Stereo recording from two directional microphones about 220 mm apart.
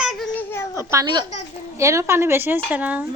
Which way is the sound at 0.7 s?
15° right (ahead or behind).